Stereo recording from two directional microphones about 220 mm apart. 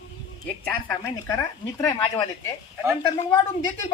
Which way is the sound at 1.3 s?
15° left (ahead or behind).